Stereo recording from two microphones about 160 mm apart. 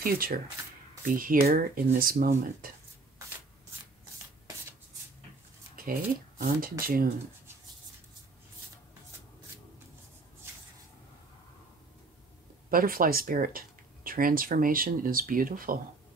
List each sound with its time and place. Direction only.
0.0 s speech: 65° right (ahead or behind)
6.3 s speech: 65° right (ahead or behind)
12.6 s speech: 65° right (ahead or behind)